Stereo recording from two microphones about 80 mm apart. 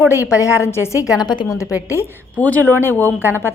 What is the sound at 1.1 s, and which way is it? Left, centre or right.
Speech, left.